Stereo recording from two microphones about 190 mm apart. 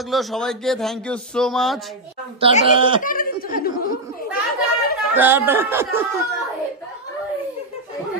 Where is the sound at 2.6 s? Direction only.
25° right (ahead or behind).